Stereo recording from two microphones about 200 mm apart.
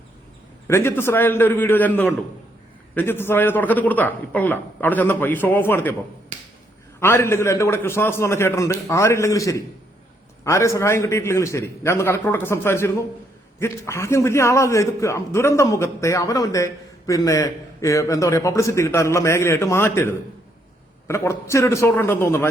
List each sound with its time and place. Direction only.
0.7 s a man's voice: 10° left (ahead or behind)
7.0 s a man's voice: 10° left (ahead or behind)